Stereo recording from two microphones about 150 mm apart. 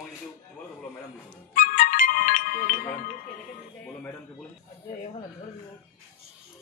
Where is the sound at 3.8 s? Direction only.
10° left (ahead or behind).